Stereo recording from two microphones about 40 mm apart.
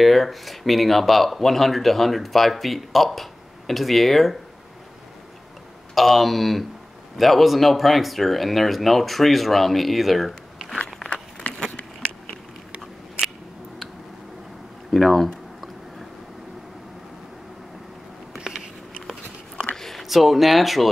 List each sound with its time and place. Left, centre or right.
0.0 s speech: centre
5.9 s speech: centre
11.4 s a sound: left
14.9 s speech: centre
18.4 s a sound: centre
19.7 s speech: centre